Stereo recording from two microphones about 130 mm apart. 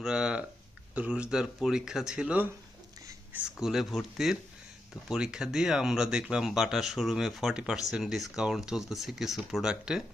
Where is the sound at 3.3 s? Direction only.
5° right (ahead or behind).